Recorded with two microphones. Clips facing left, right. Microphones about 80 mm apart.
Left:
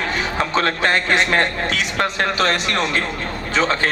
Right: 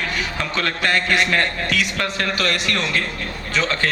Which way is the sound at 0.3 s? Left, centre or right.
Left.